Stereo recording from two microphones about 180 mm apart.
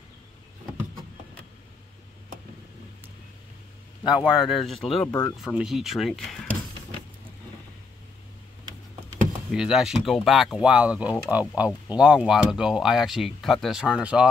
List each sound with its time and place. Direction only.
4.0 s speech: 5° right (ahead or behind)
5.0 s speech: 20° left (ahead or behind)
5.4 s speech: centre (ahead or behind)
9.5 s speech: 5° right (ahead or behind)